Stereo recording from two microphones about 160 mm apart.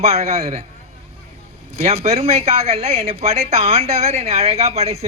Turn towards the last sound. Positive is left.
turn(degrees=-40)  # may be behind; listen again after turning